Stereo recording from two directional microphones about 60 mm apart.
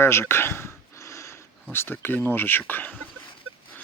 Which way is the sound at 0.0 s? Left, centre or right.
Left.